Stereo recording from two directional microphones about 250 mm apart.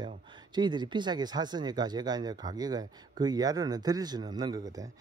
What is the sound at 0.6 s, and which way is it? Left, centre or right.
Speech, centre.